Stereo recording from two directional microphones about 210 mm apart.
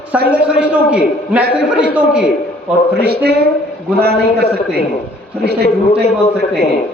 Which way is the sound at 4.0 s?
50° right (ahead or behind).